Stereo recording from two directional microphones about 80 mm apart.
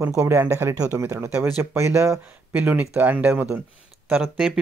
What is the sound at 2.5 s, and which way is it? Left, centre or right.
Speech, right.